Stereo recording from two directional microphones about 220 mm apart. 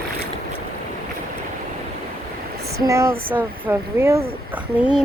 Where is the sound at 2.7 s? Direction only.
15° right (ahead or behind).